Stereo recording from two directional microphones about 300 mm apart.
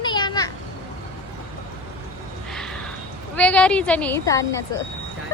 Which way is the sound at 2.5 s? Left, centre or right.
Centre.